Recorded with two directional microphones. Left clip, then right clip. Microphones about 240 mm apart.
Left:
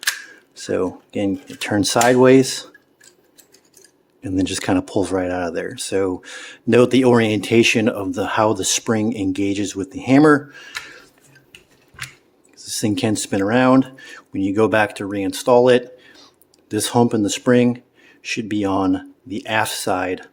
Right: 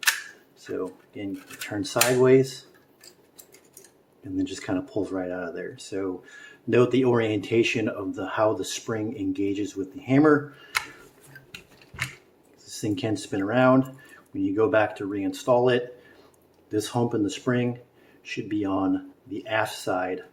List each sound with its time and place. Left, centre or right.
0.5 s speech: left
4.2 s speech: left
12.5 s speech: left